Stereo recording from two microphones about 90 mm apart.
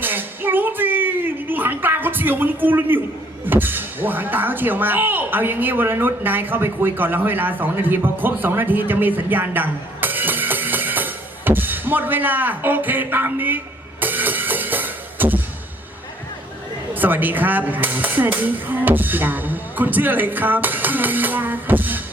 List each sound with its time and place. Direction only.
0.0 s a sound: 20° right (ahead or behind)
3.4 s speech: 20° right (ahead or behind)
14.0 s music: 20° right (ahead or behind)
16.9 s speech: 20° right (ahead or behind)